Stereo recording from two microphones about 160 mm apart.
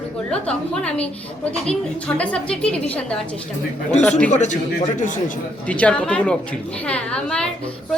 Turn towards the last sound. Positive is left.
turn(degrees=5)  # may be behind; listen again after turning